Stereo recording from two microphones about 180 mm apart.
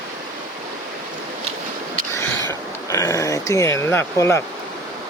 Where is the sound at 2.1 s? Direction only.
15° left (ahead or behind).